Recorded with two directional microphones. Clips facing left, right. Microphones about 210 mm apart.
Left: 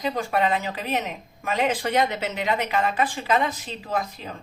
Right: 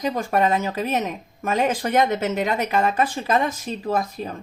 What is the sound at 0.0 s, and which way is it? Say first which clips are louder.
A woman's voice: right 3 dB; 40° right (ahead or behind).